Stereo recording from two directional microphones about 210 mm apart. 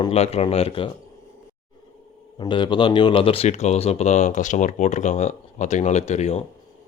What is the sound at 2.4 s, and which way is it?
Speech, 20° left (ahead or behind).